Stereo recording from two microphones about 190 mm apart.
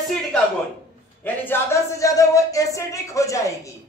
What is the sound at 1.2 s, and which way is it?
A woman's voice, 10° left (ahead or behind).